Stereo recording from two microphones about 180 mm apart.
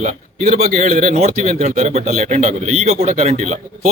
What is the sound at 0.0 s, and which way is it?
A man's voice, 45° right (ahead or behind).